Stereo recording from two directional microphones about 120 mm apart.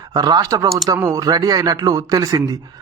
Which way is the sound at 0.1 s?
35° right (ahead or behind).